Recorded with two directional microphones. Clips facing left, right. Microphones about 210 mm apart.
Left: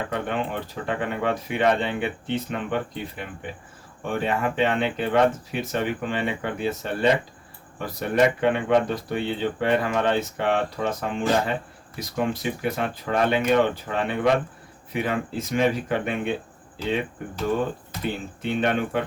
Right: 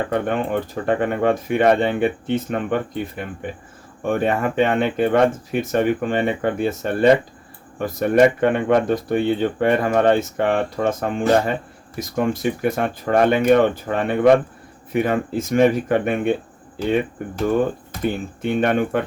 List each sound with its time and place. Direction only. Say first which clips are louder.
0.1 s speech: right 6 dB; 50° right (ahead or behind)
4.0 s speech: right 5 dB; 50° right (ahead or behind)
18.0 s speech: right 6 dB; 50° right (ahead or behind)